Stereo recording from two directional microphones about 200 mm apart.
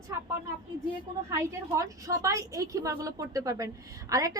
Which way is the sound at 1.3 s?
15° right (ahead or behind).